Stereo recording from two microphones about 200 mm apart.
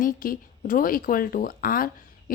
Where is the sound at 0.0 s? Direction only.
45° left (ahead or behind).